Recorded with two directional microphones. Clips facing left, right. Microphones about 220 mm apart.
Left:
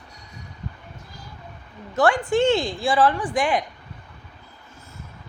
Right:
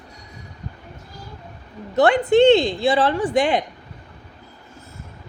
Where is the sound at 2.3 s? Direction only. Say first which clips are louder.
Right 6 dB; 20° right (ahead or behind).